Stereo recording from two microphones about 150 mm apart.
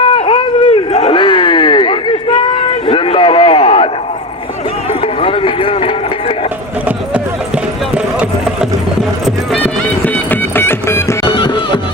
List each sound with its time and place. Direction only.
0.0 s run: 35° left (ahead or behind)
0.9 s a sound: 35° left (ahead or behind)
4.9 s run: 35° left (ahead or behind)
6.8 s clip-clop: 10° right (ahead or behind)
10.1 s music: 15° left (ahead or behind)
11.3 s music: 35° left (ahead or behind)